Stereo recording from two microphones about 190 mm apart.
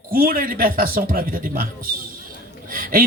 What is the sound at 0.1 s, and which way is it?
Speech, 50° right (ahead or behind).